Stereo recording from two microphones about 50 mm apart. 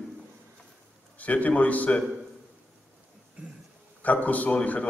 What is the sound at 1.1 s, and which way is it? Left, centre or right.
Speech, left.